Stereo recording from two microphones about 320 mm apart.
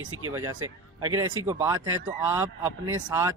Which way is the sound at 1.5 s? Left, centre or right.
Centre.